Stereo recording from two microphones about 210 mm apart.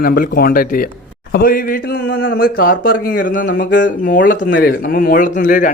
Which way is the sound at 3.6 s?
55° left (ahead or behind).